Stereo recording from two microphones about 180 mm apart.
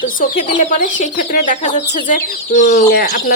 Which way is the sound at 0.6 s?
45° left (ahead or behind).